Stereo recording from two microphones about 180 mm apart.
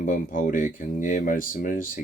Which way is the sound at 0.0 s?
45° left (ahead or behind).